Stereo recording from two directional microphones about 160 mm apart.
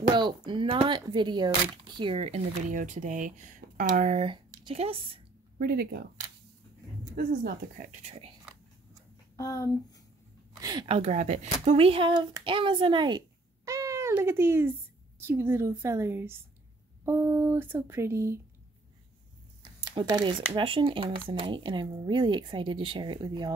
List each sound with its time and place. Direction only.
0.1 s speech: 30° right (ahead or behind)
5.6 s speech: 70° right (ahead or behind)
7.2 s speech: 65° right (ahead or behind); by 8.3 s 45° right (ahead or behind)
9.4 s speech: 20° left (ahead or behind)
10.6 s speech: 25° right (ahead or behind)
11.0 s speech: 45° right (ahead or behind); by 13.2 s 30° right (ahead or behind)
13.7 s cat: 20° right (ahead or behind)
15.1 s speech: 15° right (ahead or behind)
19.9 s speech: 25° right (ahead or behind)